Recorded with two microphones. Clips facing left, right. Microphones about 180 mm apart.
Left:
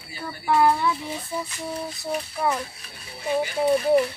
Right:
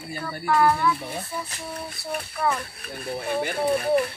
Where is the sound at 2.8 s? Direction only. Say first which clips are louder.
Right 5 dB; 55° right (ahead or behind).